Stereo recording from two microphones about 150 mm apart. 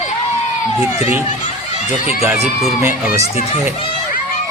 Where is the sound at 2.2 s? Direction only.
20° right (ahead or behind).